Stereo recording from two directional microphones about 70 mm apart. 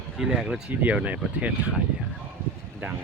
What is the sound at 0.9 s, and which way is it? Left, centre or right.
Speech, centre.